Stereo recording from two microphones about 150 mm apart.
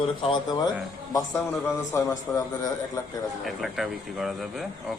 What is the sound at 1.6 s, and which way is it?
Speech, 20° left (ahead or behind).